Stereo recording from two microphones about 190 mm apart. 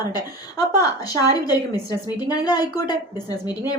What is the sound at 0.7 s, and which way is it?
A woman's voice, 20° left (ahead or behind).